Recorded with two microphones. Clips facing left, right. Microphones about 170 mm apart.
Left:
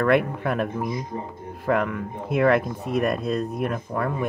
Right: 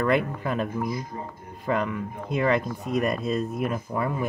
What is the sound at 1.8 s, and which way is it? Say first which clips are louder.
Speech: left 2 dB; centre (ahead or behind).